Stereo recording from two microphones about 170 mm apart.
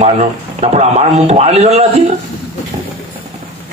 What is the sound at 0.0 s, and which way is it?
A man's voice, 40° right (ahead or behind).